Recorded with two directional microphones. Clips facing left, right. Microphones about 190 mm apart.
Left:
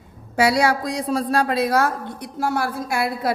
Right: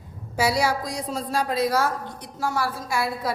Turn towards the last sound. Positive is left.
turn(degrees=60)  # may be behind; listen again after turning